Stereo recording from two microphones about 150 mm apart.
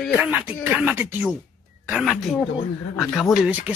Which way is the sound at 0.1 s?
10° right (ahead or behind).